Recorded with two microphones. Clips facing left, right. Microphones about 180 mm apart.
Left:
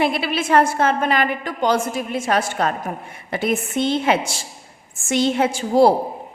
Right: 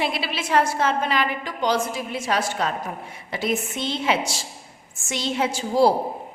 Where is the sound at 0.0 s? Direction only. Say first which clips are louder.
Left 6 dB; 55° left (ahead or behind).